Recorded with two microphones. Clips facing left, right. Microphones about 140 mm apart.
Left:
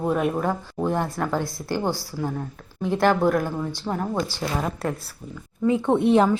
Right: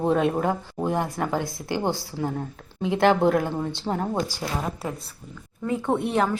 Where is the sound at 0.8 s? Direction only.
15° right (ahead or behind).